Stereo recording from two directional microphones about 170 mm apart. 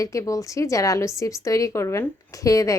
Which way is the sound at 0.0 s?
20° left (ahead or behind).